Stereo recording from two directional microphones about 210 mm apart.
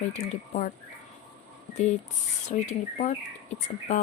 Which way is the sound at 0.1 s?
35° left (ahead or behind).